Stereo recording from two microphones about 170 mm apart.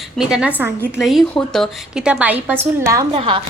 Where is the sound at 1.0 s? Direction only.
Centre (ahead or behind); by 3.1 s 20° right (ahead or behind).